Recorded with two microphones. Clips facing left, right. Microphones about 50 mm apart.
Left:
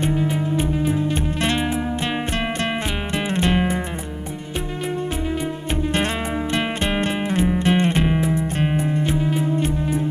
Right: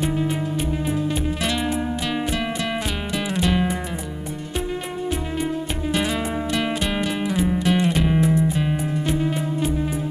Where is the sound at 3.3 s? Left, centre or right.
Left.